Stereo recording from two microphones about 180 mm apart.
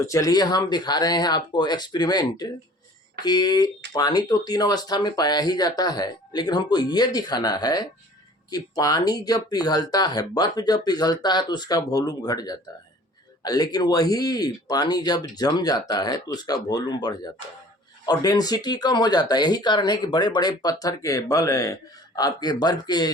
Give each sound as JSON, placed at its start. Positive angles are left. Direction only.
{"t": 0.0, "sound": "speech", "side_deg": 20}